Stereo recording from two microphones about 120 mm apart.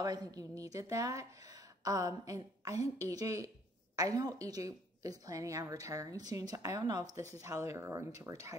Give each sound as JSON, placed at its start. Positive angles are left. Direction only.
{"t": 0.0, "sound": "a woman's voice", "side_deg": -30}